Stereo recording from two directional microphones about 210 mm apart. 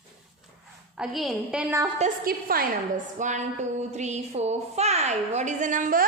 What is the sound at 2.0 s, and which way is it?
Speech, 40° right (ahead or behind).